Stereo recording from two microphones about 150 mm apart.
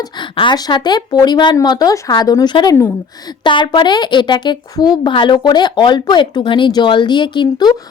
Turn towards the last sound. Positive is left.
turn(degrees=30)  # may be behind; listen again after turning